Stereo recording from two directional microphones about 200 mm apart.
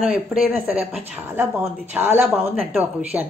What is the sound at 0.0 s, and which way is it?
A woman's voice, centre (ahead or behind).